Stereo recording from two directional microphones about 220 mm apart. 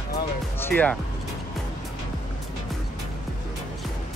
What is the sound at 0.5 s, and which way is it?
Music, 10° left (ahead or behind).